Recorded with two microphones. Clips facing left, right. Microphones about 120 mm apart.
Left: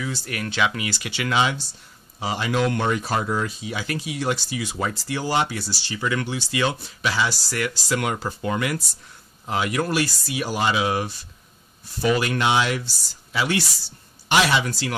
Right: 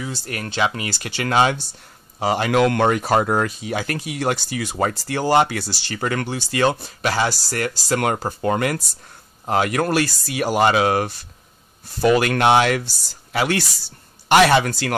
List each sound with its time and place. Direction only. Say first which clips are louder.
0.0 s speech: even; 35° right (ahead or behind); by 15.0 s 60° right (ahead or behind)